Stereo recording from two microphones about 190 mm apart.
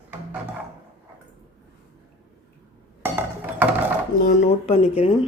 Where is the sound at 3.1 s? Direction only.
10° right (ahead or behind).